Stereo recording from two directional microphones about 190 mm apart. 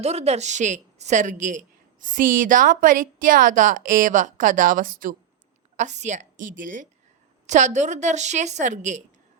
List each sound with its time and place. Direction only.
0.0 s a woman's voice: 35° right (ahead or behind)